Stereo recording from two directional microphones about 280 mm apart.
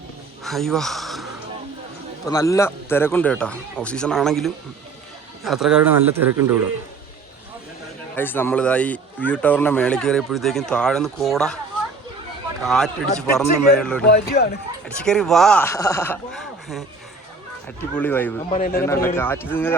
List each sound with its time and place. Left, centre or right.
0.4 s a sound: centre
2.2 s speech: centre
8.1 s speech: centre
12.6 s speech: centre
14.1 s speech: left
14.8 s speech: centre
17.9 s speech: centre
18.5 s speech: left
19.0 s speech: centre